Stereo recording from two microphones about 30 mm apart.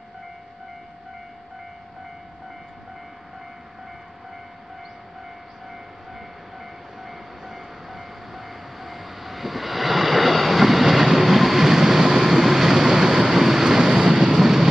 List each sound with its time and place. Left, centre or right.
7.0 s train: centre
13.3 s vehicle: centre
14.4 s vehicle: centre